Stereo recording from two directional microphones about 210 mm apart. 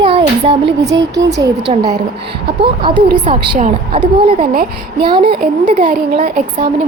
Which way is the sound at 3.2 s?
35° right (ahead or behind).